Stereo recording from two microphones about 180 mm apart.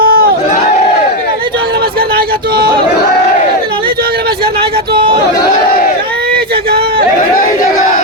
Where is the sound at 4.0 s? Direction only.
60° right (ahead or behind).